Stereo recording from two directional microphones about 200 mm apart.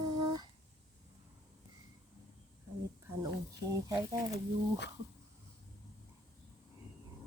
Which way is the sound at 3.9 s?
20° right (ahead or behind).